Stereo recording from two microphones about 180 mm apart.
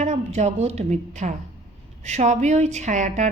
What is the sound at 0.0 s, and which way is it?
A woman's voice, 40° right (ahead or behind).